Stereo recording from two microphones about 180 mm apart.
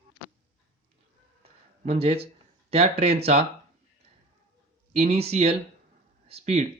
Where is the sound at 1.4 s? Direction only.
35° right (ahead or behind).